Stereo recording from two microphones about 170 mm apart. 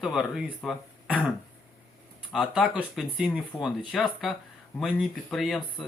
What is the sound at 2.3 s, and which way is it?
Speech, centre (ahead or behind).